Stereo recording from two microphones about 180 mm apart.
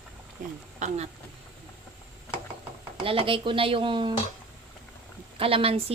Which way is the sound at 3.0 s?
30° right (ahead or behind).